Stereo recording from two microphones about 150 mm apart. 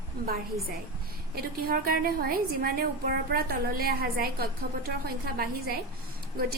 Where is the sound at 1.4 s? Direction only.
80° right.